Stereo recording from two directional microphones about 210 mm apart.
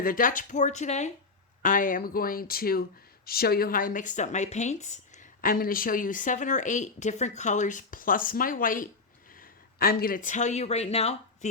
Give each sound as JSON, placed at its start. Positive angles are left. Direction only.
{"t": 0.0, "sound": "speech", "side_deg": 40}